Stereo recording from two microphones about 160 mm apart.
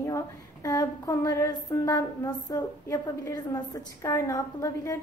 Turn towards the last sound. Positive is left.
turn(degrees=20)  # may be behind; listen again after turning